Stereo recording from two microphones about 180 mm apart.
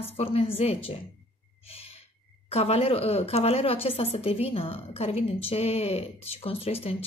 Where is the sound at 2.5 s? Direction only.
35° left (ahead or behind).